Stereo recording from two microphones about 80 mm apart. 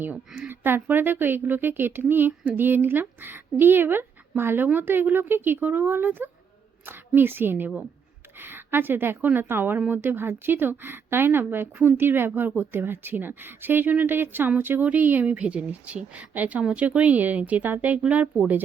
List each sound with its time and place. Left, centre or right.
0.4 s a woman's voice: right